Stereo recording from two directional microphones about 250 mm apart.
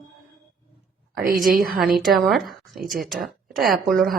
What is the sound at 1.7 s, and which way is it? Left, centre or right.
Speech, centre.